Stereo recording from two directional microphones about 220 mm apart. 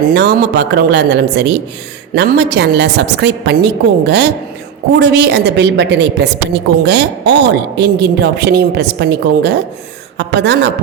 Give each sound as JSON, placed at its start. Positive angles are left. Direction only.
{"t": 0.1, "sound": "a woman's voice", "side_deg": -50}